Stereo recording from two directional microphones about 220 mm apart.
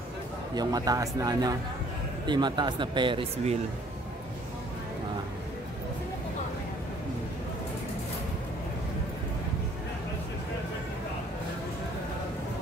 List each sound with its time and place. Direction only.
0.6 s speech: 15° right (ahead or behind)